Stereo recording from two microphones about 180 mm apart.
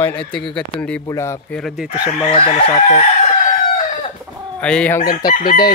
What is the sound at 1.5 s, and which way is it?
Speech, centre (ahead or behind).